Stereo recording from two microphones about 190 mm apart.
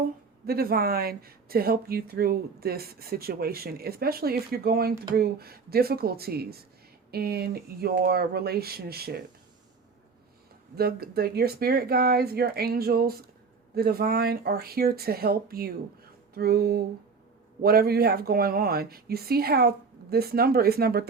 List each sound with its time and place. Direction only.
0.4 s speech: 55° right (ahead or behind)
10.8 s speech: 55° right (ahead or behind)